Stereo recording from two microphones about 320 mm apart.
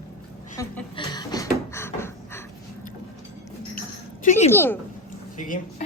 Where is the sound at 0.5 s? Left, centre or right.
Centre.